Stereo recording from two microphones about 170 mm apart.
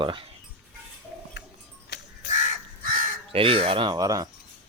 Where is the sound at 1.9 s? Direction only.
70° left (ahead or behind).